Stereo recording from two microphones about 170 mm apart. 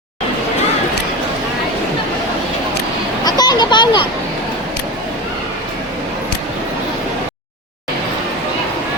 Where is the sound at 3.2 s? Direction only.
25° left (ahead or behind).